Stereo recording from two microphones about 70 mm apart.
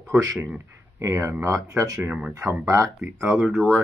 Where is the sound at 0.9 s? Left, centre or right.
Right.